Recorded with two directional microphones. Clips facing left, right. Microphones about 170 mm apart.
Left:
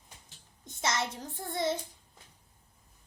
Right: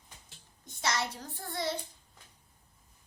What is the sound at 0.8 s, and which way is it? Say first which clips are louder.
Speech: left 1 dB; 25° left (ahead or behind).